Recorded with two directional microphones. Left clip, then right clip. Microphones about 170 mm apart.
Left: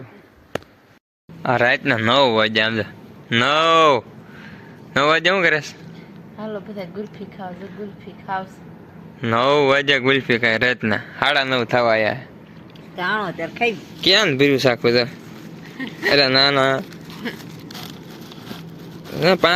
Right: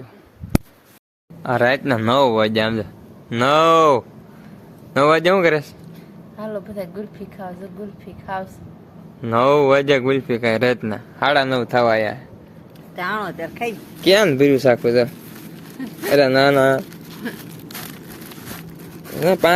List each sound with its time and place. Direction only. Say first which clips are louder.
1.4 s a sound: left 1 dB; 20° left (ahead or behind)
1.6 s a man's voice: right 1 dB; 5° right (ahead or behind)
6.4 s a sound: right 2 dB; 35° right (ahead or behind)
6.9 s speech: even; 20° right (ahead or behind)
9.2 s a man's voice: right 1 dB; centre (ahead or behind)
11.7 s speech: even; 20° left (ahead or behind)
13.2 s speech: left 4 dB; 45° left (ahead or behind)
14.0 s a man's voice: right 1 dB; centre (ahead or behind)
19.2 s a man's voice: even; centre (ahead or behind)